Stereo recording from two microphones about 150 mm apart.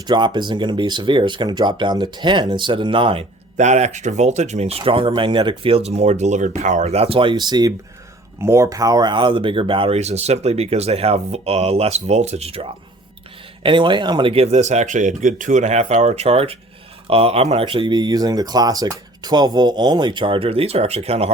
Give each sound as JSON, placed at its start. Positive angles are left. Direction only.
{"t": 0.0, "sound": "speech", "side_deg": -30}
{"t": 3.6, "sound": "speech", "side_deg": -50}